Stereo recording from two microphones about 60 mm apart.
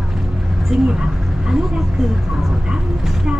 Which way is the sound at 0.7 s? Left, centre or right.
Centre.